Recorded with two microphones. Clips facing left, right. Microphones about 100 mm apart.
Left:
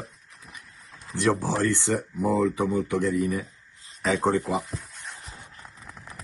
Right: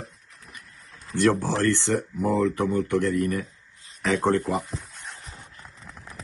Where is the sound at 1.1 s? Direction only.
10° left (ahead or behind).